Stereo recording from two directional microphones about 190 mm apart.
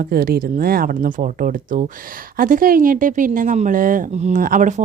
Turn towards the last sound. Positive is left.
turn(degrees=-45)  # may be behind; listen again after turning